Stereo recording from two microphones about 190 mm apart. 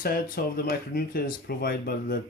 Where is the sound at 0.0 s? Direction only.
50° left (ahead or behind).